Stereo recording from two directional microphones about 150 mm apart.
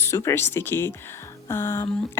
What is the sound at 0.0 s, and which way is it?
Speech, 20° left (ahead or behind).